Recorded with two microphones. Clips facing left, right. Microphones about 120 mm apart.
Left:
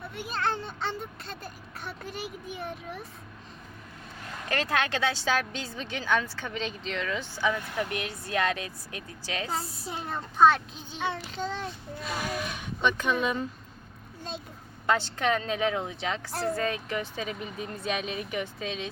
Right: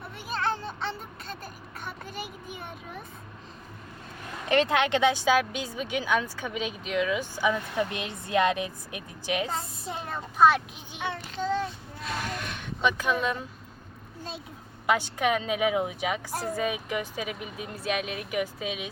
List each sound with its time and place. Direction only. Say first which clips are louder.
0.1 s a child's voice: right 1 dB; centre (ahead or behind)
4.4 s a woman's voice: right 5 dB; 20° right (ahead or behind)
9.5 s a child's voice: even; 5° left (ahead or behind)
12.0 s speech: left 1 dB; 5° left (ahead or behind)
14.8 s a woman's voice: right 1 dB; 10° right (ahead or behind)